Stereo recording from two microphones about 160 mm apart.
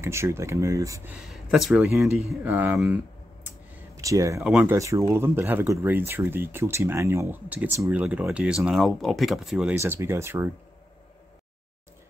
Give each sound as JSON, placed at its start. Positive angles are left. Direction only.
{"t": 0.0, "sound": "speech", "side_deg": -15}
{"t": 1.1, "sound": "speech", "side_deg": -5}
{"t": 3.9, "sound": "speech", "side_deg": -20}
{"t": 4.4, "sound": "speech", "side_deg": -5}
{"t": 4.7, "sound": "speech", "side_deg": -20}
{"t": 9.8, "sound": "speech", "side_deg": -15}